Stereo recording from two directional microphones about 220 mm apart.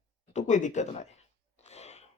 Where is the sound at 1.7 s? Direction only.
30° left (ahead or behind).